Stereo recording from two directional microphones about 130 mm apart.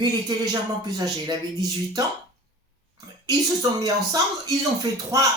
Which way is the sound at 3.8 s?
30° right (ahead or behind).